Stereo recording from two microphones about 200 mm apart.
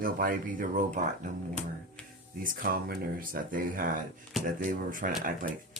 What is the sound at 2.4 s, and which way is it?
Speech, 45° right (ahead or behind).